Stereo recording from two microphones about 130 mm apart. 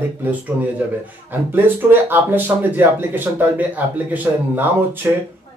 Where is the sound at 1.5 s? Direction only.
15° right (ahead or behind).